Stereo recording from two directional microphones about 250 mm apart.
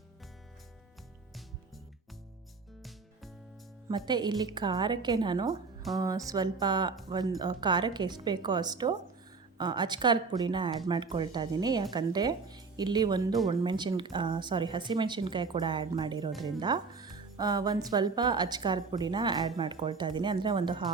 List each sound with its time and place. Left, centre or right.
3.8 s a woman's voice: centre